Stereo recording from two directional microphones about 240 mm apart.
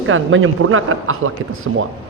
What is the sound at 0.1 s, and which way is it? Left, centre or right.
A man's voice, right.